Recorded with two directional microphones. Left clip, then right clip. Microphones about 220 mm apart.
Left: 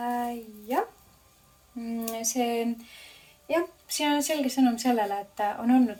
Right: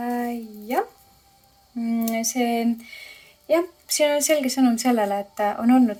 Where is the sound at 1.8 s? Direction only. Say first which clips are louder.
Right 7 dB; 50° right (ahead or behind).